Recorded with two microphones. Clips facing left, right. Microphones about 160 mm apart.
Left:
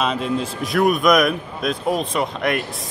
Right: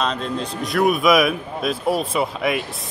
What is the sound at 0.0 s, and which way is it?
Speech, 5° left (ahead or behind).